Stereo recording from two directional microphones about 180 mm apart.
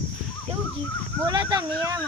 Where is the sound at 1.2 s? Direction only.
25° right (ahead or behind).